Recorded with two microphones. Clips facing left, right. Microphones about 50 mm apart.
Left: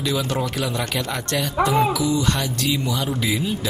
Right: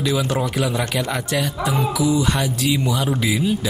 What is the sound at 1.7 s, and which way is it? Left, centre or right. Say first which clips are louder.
Speech: right 1 dB; centre.